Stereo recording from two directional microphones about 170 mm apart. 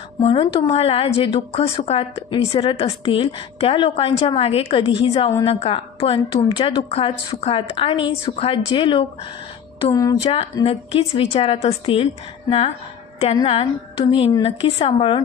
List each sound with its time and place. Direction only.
0.2 s a woman's voice: 30° left (ahead or behind)
9.8 s a sound: 25° left (ahead or behind)
10.2 s a woman's voice: 35° left (ahead or behind)
14.3 s a woman's voice: 30° left (ahead or behind)